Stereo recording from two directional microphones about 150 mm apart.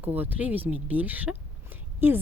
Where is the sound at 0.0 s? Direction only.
10° right (ahead or behind).